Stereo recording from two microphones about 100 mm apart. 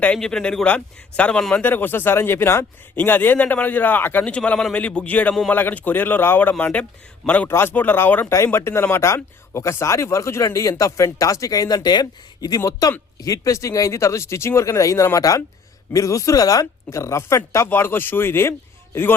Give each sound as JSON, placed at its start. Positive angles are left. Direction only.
{"t": 0.0, "sound": "a man's voice", "side_deg": 10}
{"t": 1.6, "sound": "a man's voice", "side_deg": 20}